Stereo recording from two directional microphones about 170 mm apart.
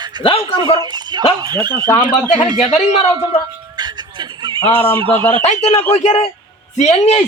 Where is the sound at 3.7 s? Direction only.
25° right (ahead or behind).